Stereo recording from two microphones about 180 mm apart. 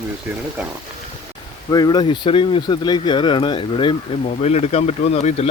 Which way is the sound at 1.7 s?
20° left (ahead or behind).